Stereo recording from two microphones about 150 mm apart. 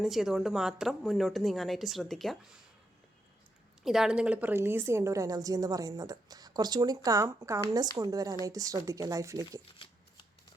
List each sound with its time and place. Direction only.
0.0 s a woman's voice: centre (ahead or behind)
3.8 s a woman's voice: 5° right (ahead or behind); by 9.6 s 20° right (ahead or behind)
9.7 s shuffling cards: 35° left (ahead or behind)